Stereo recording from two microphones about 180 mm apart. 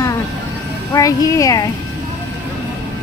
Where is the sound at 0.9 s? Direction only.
20° left (ahead or behind).